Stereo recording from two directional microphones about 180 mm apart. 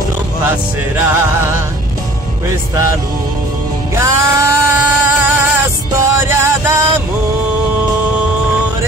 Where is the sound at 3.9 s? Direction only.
15° right (ahead or behind).